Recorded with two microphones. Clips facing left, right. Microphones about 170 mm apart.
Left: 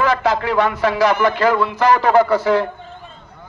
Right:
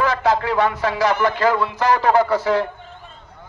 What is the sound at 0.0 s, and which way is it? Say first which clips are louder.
A man's voice: left 1 dB; 90° left.